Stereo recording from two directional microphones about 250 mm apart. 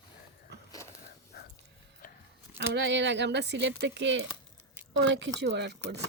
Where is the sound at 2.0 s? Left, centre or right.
Left.